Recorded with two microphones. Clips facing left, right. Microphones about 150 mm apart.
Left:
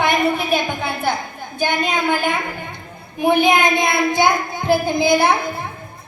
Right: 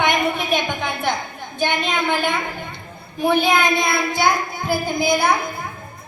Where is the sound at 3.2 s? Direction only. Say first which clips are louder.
Left 2 dB; 15° left (ahead or behind).